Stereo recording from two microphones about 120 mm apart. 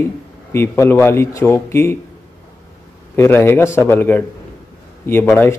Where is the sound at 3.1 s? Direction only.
20° left (ahead or behind).